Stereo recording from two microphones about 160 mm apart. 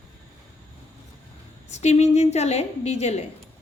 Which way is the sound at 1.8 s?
45° left (ahead or behind).